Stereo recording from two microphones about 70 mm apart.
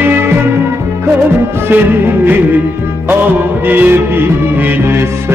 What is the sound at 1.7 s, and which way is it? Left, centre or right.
Music, right.